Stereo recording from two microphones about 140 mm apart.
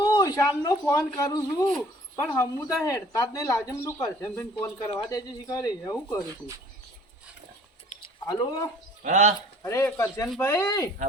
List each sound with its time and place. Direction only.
0.0 s speech: 25° left (ahead or behind)
8.3 s speech: 25° left (ahead or behind)
9.0 s speech: 55° right (ahead or behind)
9.6 s speech: 15° left (ahead or behind)